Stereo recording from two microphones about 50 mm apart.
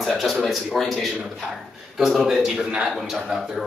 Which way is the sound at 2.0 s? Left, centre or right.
Centre.